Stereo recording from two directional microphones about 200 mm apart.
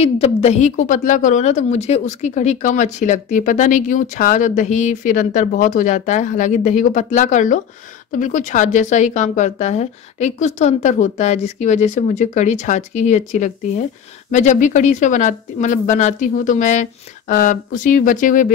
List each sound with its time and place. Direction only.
0.0 s speech: 30° left (ahead or behind)